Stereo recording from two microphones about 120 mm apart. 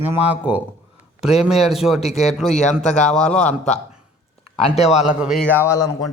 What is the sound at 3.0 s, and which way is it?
Speech, 5° left (ahead or behind).